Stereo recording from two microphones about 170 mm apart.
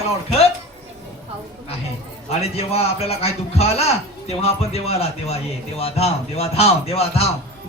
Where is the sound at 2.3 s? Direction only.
35° left (ahead or behind).